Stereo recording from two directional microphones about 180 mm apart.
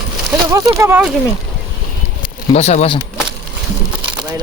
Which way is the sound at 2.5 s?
35° left (ahead or behind).